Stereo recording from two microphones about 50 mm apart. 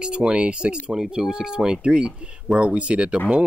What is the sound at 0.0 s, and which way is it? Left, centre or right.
Speech, centre.